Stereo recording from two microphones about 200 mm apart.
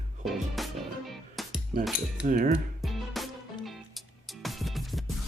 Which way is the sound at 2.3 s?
40° right (ahead or behind).